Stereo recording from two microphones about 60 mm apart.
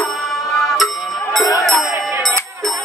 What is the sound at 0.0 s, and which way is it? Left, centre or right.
Music, centre.